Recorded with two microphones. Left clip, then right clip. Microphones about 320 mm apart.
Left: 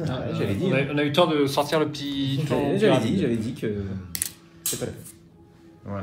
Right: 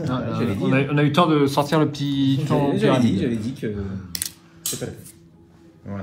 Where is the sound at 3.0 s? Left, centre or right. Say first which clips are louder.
Right 2 dB; left.